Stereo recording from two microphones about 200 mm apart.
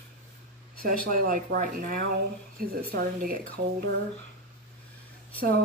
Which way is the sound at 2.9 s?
45° right (ahead or behind).